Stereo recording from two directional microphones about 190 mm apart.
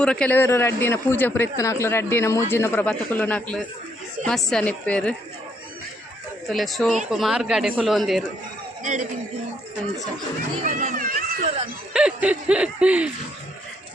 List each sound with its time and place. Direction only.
0.0 s a man's voice: 5° left (ahead or behind)
6.5 s speech: centre (ahead or behind)
8.8 s a man's voice: 40° right (ahead or behind)
10.6 s a child's voice: 40° right (ahead or behind)
11.9 s speech: 5° right (ahead or behind)